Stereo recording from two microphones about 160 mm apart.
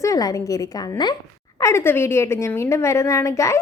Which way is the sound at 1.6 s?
15° left (ahead or behind).